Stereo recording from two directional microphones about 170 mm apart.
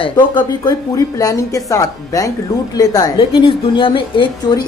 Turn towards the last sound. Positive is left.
turn(degrees=30)  # may be behind; listen again after turning